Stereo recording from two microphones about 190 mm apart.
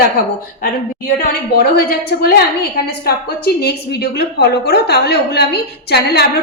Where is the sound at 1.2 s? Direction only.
55° left (ahead or behind).